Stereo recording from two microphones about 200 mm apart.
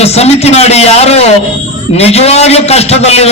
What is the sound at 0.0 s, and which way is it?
A man's voice, 30° left (ahead or behind).